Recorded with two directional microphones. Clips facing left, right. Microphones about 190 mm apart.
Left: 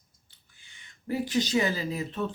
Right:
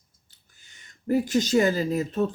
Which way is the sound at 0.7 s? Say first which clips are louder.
Right 8 dB; 45° right (ahead or behind).